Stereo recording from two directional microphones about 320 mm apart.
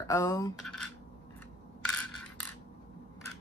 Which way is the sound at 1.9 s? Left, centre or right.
Centre.